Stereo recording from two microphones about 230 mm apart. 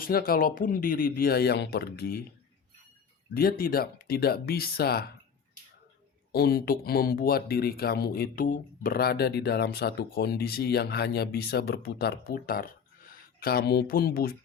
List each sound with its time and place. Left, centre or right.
0.0 s speech: left
3.3 s speech: left
6.3 s speech: left